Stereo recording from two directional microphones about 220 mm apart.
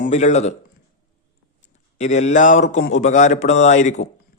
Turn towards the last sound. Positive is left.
turn(degrees=35)  # may be behind; listen again after turning